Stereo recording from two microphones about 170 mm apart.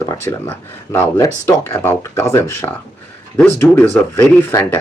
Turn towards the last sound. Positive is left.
turn(degrees=15)  # may be behind; listen again after turning